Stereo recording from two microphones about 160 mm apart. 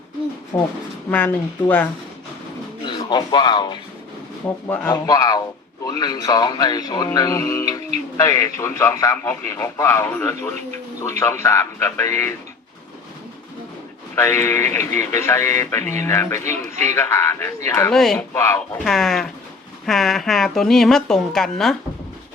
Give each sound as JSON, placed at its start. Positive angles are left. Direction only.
{"t": 0.5, "sound": "speech", "side_deg": 15}
{"t": 2.8, "sound": "speech", "side_deg": 30}
{"t": 4.9, "sound": "speech", "side_deg": 25}
{"t": 14.2, "sound": "speech", "side_deg": 15}
{"t": 17.9, "sound": "speech", "side_deg": 5}
{"t": 18.3, "sound": "speech", "side_deg": 15}
{"t": 18.9, "sound": "speech", "side_deg": 0}